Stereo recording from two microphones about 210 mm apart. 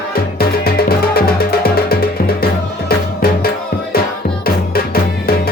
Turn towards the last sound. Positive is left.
turn(degrees=45)  # may be behind; listen again after turning